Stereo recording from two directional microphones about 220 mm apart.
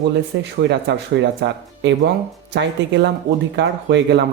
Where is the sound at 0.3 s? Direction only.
50° right (ahead or behind).